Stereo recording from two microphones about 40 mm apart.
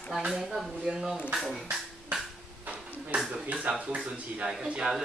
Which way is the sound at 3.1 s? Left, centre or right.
Centre.